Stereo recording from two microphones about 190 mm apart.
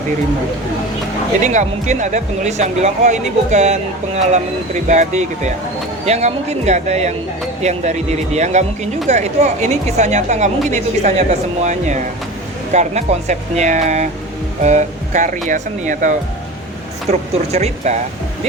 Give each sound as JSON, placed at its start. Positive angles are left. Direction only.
{"t": 1.4, "sound": "speech", "side_deg": -40}